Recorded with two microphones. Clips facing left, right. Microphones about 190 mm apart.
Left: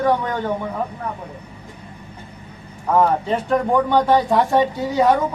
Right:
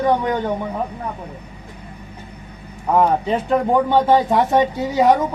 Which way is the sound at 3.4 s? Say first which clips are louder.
Right 1 dB; 20° right (ahead or behind).